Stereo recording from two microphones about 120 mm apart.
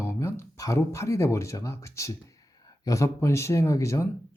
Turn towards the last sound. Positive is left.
turn(degrees=25)  # may be behind; listen again after turning